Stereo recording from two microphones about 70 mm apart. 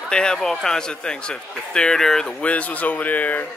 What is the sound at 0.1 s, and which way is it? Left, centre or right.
Speech, centre.